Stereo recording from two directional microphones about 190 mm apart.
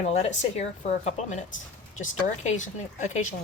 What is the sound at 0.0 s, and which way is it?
Speech, 35° left (ahead or behind).